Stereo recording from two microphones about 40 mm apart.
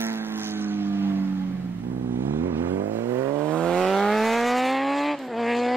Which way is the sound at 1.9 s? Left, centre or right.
Right.